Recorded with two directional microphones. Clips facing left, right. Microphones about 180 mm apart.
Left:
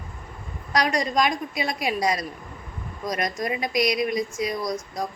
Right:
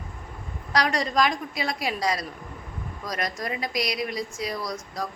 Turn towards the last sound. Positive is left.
turn(degrees=20)  # may be behind; listen again after turning